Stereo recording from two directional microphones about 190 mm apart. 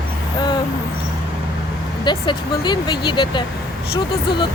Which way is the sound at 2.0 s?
25° left (ahead or behind).